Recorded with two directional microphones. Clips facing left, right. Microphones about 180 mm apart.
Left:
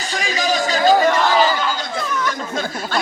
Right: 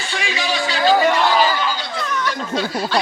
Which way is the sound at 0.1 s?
40° left (ahead or behind).